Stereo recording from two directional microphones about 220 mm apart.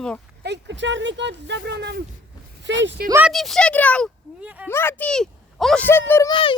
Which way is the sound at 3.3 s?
Centre (ahead or behind).